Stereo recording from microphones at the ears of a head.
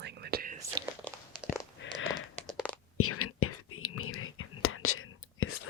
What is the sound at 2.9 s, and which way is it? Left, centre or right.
Whispering, left.